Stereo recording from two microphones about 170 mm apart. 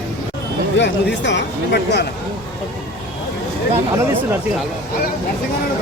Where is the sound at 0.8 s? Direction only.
90° left.